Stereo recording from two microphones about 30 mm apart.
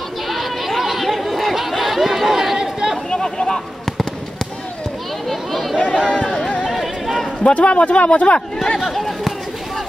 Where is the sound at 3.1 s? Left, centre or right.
Left.